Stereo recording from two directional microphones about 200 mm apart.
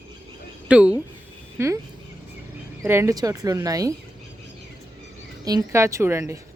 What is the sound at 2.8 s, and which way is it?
Speech, 10° right (ahead or behind).